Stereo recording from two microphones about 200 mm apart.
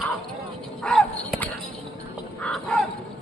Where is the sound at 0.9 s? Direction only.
Centre (ahead or behind).